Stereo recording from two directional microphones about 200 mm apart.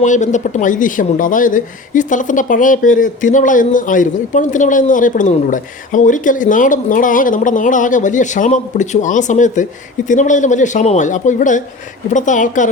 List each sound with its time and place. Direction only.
0.0 s speech: 35° left (ahead or behind)